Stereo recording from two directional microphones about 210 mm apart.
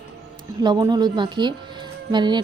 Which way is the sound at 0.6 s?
20° right (ahead or behind).